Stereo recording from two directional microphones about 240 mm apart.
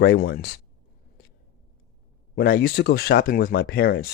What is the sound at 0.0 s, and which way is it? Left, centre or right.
Speech, left.